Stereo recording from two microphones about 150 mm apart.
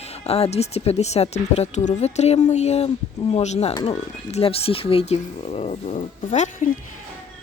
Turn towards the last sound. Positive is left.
turn(degrees=55)  # may be behind; listen again after turning